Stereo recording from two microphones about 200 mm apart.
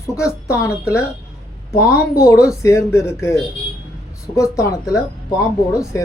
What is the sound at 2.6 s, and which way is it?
Speech, 15° left (ahead or behind).